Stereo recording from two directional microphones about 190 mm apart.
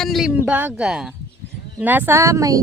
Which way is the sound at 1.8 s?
10° right (ahead or behind).